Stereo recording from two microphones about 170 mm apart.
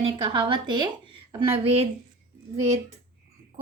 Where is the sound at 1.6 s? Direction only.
35° right (ahead or behind).